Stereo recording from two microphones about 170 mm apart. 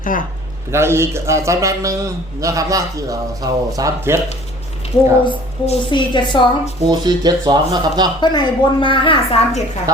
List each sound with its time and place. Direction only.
0.0 s a man's voice: 50° left (ahead or behind)
0.7 s a man's voice: 15° right (ahead or behind)
5.2 s a woman's voice: 30° left (ahead or behind)
6.8 s a man's voice: 25° right (ahead or behind)
8.2 s a woman's voice: 25° left (ahead or behind)